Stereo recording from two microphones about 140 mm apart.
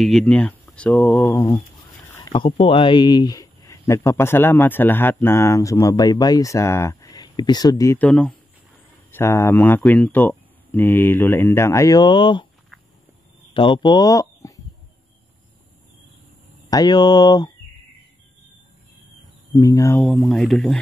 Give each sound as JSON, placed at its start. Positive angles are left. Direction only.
{"t": 0.0, "sound": "speech", "side_deg": 5}
{"t": 2.3, "sound": "speech", "side_deg": 40}
{"t": 8.0, "sound": "speech", "side_deg": 5}
{"t": 9.1, "sound": "speech", "side_deg": 15}
{"t": 13.5, "sound": "speech", "side_deg": 35}
{"t": 16.7, "sound": "speech", "side_deg": 30}
{"t": 19.5, "sound": "speech", "side_deg": 25}
{"t": 20.0, "sound": "speech", "side_deg": 5}